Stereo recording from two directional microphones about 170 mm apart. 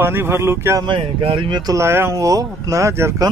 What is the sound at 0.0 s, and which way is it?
Speech, 15° right (ahead or behind).